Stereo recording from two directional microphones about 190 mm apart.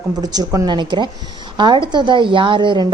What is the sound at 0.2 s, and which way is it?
A woman's voice, 20° right (ahead or behind).